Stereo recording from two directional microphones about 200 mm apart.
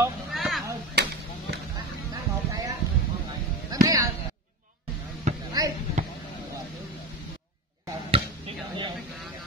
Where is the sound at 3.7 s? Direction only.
20° right (ahead or behind).